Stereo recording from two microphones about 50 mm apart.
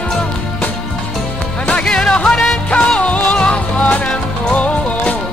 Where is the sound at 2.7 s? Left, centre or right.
Left.